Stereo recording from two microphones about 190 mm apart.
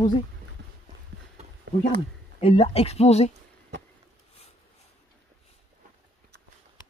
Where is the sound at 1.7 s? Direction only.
65° right (ahead or behind).